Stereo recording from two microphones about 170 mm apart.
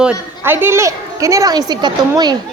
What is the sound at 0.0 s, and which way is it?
A woman's voice, 10° right (ahead or behind).